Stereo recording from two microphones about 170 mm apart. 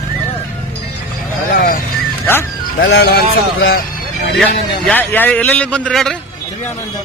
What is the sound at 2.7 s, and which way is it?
Speech, 75° left (ahead or behind).